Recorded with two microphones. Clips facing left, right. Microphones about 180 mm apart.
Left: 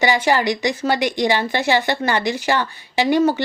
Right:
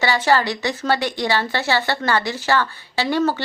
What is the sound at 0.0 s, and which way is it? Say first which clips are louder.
Speech: left 1 dB; 15° left (ahead or behind).